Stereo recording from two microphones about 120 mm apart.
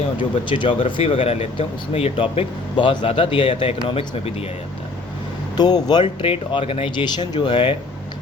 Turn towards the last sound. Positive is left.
turn(degrees=45)  # may be behind; listen again after turning